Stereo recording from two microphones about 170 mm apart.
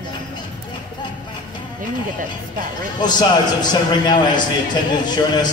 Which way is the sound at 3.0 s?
25° left (ahead or behind).